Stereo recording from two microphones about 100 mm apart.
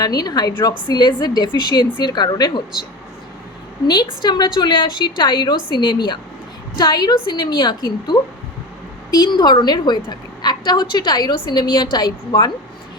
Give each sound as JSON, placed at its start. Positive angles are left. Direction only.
{"t": 0.0, "sound": "a woman's voice", "side_deg": 40}
{"t": 3.8, "sound": "a woman's voice", "side_deg": 50}